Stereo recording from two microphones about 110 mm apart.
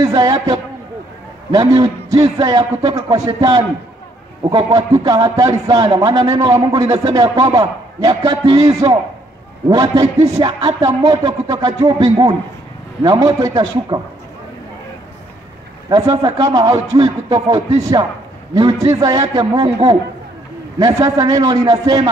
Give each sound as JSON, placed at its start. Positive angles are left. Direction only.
{"t": 0.0, "sound": "speech", "side_deg": -35}
{"t": 1.8, "sound": "a man's voice", "side_deg": -35}
{"t": 15.9, "sound": "speech", "side_deg": -35}
{"t": 20.8, "sound": "speech", "side_deg": -35}